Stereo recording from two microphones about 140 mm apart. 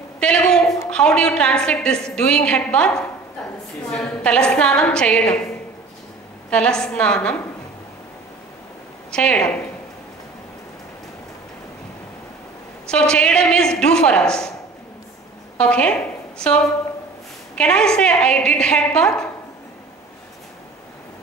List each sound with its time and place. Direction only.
0.2 s a sound: 5° left (ahead or behind)
0.8 s a woman's voice: 5° left (ahead or behind)
6.5 s a woman's voice: 5° left (ahead or behind)
9.1 s a woman's voice: 5° left (ahead or behind)
12.8 s a woman's voice: 5° left (ahead or behind)
15.5 s a woman's voice: 5° left (ahead or behind)